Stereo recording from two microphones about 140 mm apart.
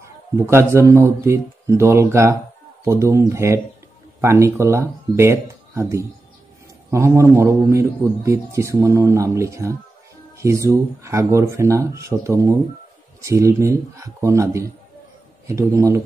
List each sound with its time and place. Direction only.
0.4 s a man's voice: 20° right (ahead or behind)